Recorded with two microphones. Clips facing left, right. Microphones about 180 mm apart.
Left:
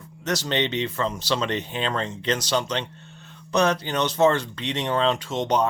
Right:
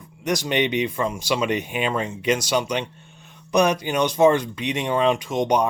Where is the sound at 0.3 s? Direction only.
15° right (ahead or behind).